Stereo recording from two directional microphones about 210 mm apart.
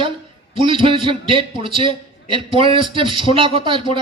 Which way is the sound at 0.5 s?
25° right (ahead or behind).